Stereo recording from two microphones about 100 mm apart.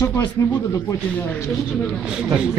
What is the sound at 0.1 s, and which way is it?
Speech, 25° left (ahead or behind).